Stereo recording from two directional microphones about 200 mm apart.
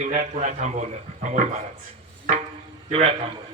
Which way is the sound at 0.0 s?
40° right (ahead or behind).